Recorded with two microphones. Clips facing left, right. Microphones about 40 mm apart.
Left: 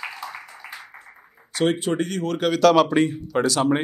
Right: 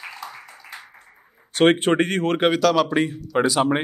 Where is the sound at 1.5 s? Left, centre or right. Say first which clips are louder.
Right 5 dB; right.